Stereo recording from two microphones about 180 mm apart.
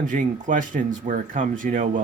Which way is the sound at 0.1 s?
45° right (ahead or behind).